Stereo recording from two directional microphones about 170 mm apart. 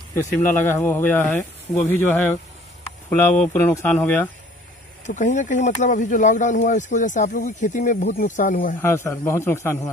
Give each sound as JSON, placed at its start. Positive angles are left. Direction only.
{"t": 0.1, "sound": "speech", "side_deg": 15}
{"t": 5.0, "sound": "speech", "side_deg": 45}
{"t": 8.8, "sound": "speech", "side_deg": 15}